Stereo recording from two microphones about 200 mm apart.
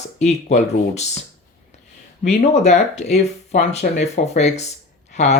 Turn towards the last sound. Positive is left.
turn(degrees=35)  # may be behind; listen again after turning